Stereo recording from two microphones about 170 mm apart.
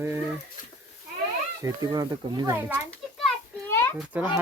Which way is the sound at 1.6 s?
20° right (ahead or behind).